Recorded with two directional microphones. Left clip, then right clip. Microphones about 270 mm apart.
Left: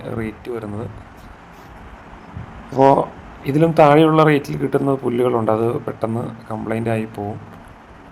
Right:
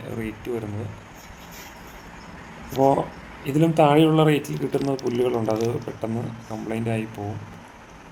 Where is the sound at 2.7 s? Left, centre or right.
Centre.